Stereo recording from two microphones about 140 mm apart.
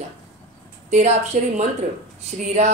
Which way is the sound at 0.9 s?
55° right (ahead or behind).